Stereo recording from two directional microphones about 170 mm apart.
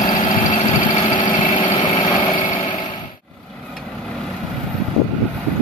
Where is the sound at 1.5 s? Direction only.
30° left (ahead or behind).